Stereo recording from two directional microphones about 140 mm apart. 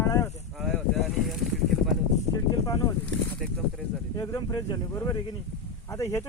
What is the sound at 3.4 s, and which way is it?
Speech, 5° left (ahead or behind).